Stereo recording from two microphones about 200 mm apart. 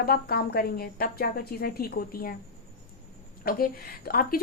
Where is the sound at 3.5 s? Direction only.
45° left (ahead or behind).